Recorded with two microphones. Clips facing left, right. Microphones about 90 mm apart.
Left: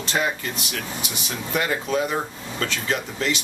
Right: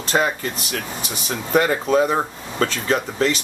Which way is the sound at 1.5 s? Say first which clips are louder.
Right 7 dB; 40° right (ahead or behind).